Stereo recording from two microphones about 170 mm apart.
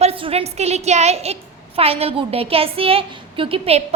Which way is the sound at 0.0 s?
35° right (ahead or behind).